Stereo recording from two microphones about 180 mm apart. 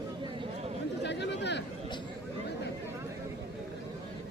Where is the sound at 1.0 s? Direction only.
70° left (ahead or behind).